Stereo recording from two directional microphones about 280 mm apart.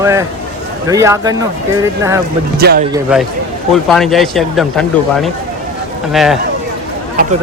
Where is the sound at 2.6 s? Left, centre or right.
Right.